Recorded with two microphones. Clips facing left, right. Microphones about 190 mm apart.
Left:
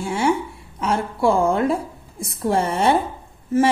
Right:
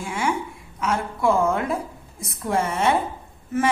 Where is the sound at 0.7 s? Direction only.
30° left (ahead or behind).